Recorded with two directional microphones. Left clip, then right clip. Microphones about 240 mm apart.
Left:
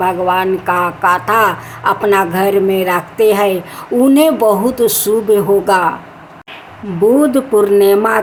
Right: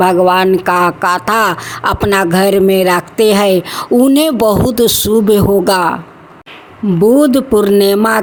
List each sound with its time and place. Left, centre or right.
0.0 s speech: right
7.0 s speech: right